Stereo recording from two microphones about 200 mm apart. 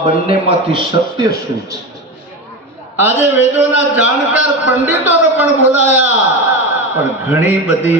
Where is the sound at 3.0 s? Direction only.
10° right (ahead or behind).